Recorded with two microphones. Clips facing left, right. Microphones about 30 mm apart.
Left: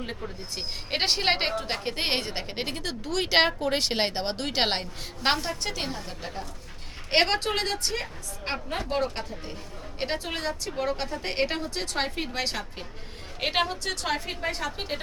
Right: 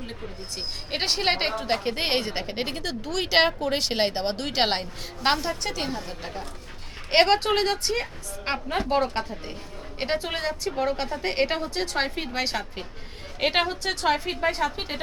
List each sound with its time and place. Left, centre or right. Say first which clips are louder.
0.1 s a woman's voice: left 1 dB; centre